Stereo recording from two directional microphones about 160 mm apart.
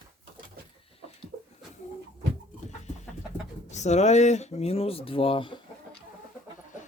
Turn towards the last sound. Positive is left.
turn(degrees=35)  # may be behind; listen again after turning